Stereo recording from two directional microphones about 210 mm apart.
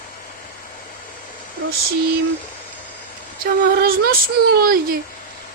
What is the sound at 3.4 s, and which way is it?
Speech, 45° right (ahead or behind).